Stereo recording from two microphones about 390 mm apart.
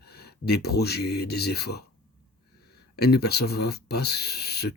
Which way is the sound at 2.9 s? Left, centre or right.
Left.